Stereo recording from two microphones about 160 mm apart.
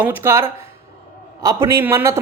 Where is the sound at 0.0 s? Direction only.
15° right (ahead or behind).